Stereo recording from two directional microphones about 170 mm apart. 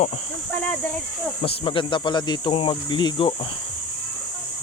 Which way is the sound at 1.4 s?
30° left (ahead or behind).